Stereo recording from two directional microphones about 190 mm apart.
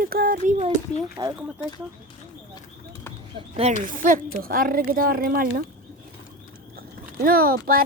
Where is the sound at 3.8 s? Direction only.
45° right (ahead or behind).